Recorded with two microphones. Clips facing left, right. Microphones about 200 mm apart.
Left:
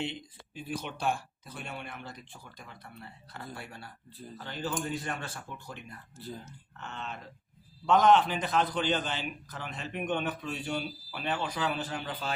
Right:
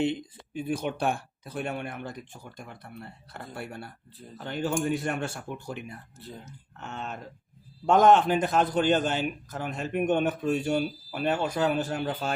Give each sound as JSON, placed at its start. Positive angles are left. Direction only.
{"t": 0.0, "sound": "a man's voice", "side_deg": -50}